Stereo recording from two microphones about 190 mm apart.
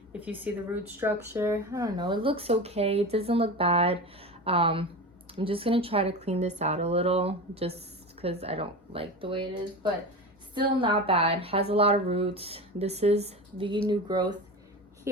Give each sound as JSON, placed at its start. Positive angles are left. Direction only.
{"t": 0.1, "sound": "a woman's voice", "side_deg": -10}